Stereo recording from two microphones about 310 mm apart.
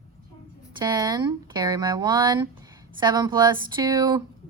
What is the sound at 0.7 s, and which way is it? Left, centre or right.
A woman's voice, centre.